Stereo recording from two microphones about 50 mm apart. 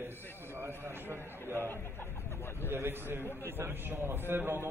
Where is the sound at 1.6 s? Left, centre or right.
Left.